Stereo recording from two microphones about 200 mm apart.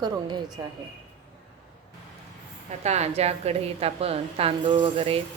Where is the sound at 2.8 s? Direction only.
35° right (ahead or behind).